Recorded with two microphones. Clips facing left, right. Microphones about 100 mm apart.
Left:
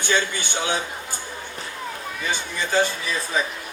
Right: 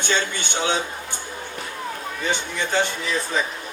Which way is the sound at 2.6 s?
20° right (ahead or behind).